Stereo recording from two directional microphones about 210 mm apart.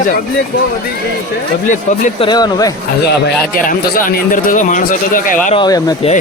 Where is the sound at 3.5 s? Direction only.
40° left (ahead or behind).